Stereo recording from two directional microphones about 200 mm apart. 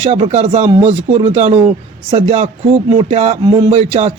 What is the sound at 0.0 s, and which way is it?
A man's voice, 35° right (ahead or behind).